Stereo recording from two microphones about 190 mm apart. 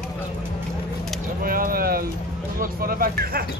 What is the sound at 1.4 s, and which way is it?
Speech, 50° right (ahead or behind).